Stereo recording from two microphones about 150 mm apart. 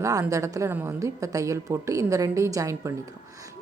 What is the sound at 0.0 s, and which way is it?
Speech, 20° right (ahead or behind).